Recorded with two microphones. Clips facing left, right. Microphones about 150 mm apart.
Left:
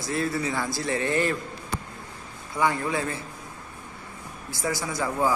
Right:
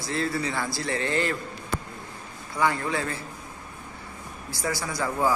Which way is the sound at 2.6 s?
20° left (ahead or behind).